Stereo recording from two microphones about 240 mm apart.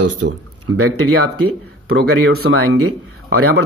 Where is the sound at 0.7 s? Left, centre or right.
Right.